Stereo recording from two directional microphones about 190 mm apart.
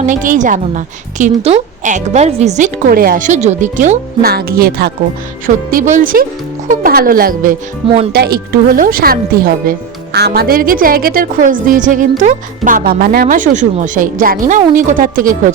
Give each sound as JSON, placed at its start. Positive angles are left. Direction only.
{"t": 0.0, "sound": "a woman's voice", "side_deg": -40}
{"t": 5.7, "sound": "speech", "side_deg": -45}